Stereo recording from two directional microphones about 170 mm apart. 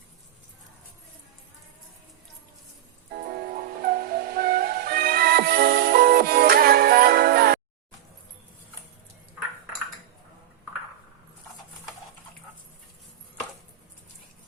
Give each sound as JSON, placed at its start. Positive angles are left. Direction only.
{"t": 3.5, "sound": "music", "side_deg": -60}